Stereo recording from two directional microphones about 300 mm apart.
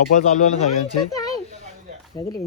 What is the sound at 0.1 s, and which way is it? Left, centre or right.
Speech, left.